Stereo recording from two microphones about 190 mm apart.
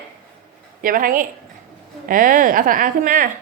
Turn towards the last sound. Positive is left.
turn(degrees=-45)  # may be behind; listen again after turning